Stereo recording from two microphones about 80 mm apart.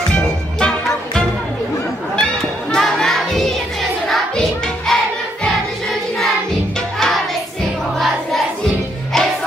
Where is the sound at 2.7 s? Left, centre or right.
Centre.